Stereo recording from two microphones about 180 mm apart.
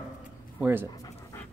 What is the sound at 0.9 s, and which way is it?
Dog, 20° left (ahead or behind).